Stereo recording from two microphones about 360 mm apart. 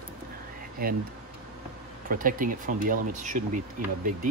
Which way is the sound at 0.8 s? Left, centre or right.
Right.